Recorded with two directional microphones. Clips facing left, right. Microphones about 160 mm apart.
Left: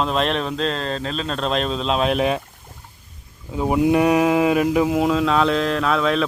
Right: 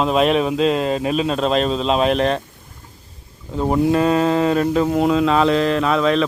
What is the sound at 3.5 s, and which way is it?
Speech, 5° left (ahead or behind).